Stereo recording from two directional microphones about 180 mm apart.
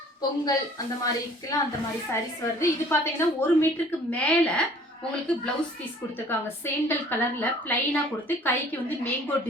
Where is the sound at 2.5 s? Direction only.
15° left (ahead or behind).